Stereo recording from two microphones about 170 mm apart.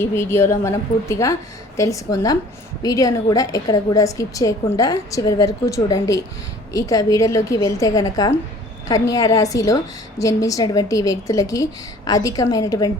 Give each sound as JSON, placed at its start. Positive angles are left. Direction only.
{"t": 0.0, "sound": "a woman's voice", "side_deg": 15}